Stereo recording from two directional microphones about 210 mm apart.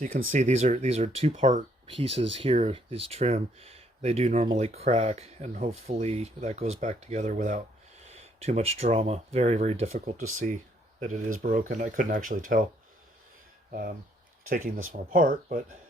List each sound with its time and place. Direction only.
0.3 s speech: 35° right (ahead or behind)
13.7 s speech: 45° right (ahead or behind)